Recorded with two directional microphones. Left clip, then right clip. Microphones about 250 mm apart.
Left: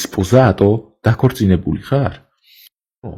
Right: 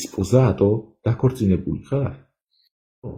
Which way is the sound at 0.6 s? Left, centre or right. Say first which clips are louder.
Left 5 dB; left.